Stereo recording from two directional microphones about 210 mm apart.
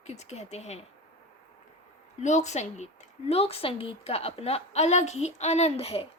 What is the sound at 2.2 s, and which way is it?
Speech, 35° left (ahead or behind).